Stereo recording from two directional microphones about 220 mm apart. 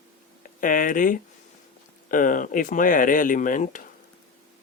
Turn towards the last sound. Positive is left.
turn(degrees=35)  # may be behind; listen again after turning